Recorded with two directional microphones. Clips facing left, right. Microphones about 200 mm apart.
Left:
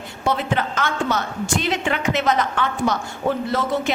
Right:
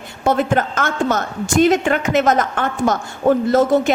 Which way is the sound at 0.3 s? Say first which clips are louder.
Right 5 dB; 45° right (ahead or behind).